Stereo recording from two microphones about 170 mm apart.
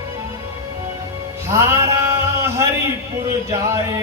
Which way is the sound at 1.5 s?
15° right (ahead or behind).